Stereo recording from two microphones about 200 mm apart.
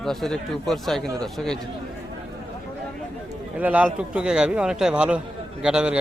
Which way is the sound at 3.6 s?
5° right (ahead or behind).